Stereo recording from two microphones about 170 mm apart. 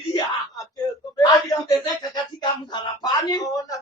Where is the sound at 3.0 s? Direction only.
20° left (ahead or behind).